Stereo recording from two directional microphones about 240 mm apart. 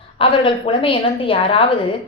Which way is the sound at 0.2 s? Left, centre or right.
Left.